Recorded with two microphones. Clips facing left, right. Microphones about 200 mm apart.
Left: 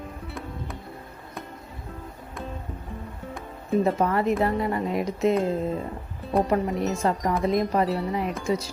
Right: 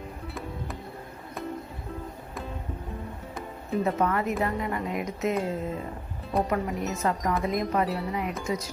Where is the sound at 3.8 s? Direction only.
35° left (ahead or behind).